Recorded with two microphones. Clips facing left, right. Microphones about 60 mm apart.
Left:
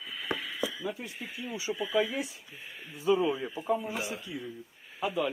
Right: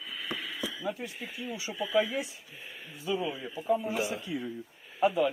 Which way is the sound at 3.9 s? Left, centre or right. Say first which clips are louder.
Right 4 dB; right.